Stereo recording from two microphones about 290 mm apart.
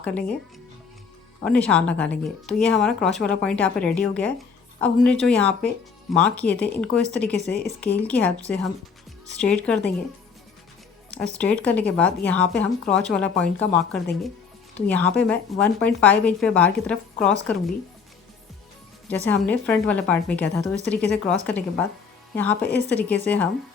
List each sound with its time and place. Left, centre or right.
0.0 s speech: centre
1.5 s speech: centre
11.2 s speech: centre
19.1 s speech: centre